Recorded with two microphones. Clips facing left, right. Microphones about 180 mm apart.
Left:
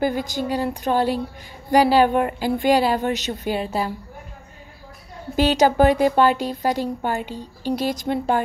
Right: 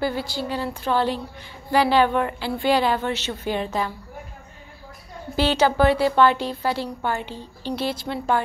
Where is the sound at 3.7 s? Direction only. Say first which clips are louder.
Left 2 dB; 35° left (ahead or behind).